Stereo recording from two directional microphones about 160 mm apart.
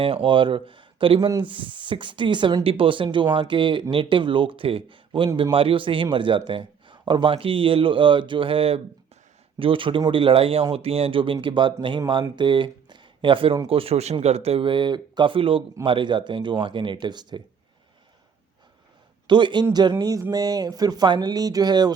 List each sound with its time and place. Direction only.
0.0 s speech: 35° right (ahead or behind)
19.3 s speech: 30° right (ahead or behind)